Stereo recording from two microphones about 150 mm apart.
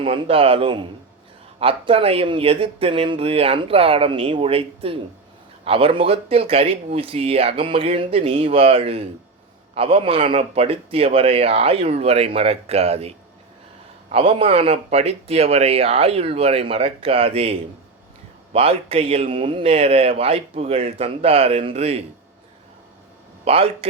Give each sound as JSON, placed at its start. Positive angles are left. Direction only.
{"t": 0.0, "sound": "speech", "side_deg": -40}
{"t": 23.5, "sound": "speech", "side_deg": -40}